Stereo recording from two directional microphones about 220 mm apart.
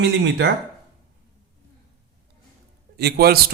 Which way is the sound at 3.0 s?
45° right (ahead or behind).